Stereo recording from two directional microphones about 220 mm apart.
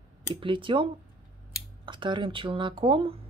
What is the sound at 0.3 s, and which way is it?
Speech, 20° right (ahead or behind).